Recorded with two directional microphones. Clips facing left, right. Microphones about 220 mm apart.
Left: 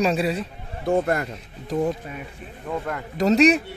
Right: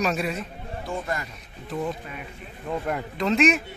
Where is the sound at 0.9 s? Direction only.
60° left (ahead or behind).